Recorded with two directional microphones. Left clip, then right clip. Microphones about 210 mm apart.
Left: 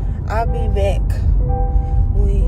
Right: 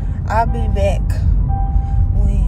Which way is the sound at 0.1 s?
5° left (ahead or behind).